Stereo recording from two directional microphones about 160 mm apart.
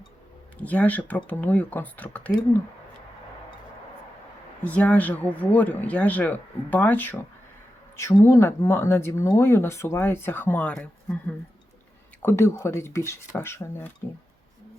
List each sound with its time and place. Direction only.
0.6 s speech: 10° left (ahead or behind)
4.6 s speech: 10° left (ahead or behind)